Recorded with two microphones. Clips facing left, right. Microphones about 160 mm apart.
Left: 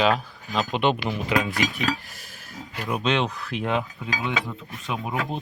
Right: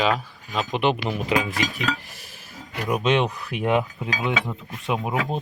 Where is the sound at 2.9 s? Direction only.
5° right (ahead or behind).